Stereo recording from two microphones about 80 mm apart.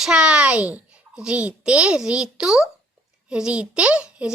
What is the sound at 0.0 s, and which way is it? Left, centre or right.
A child's voice, centre.